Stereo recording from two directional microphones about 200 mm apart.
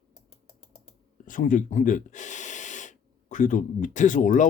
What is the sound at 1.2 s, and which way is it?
Speech, 40° left (ahead or behind).